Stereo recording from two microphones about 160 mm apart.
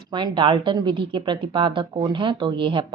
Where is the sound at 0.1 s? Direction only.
30° right (ahead or behind).